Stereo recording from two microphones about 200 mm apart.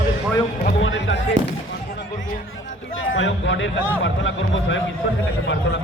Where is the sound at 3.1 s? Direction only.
70° left (ahead or behind).